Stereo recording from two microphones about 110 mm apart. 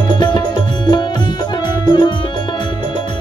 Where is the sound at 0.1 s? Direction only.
45° left (ahead or behind).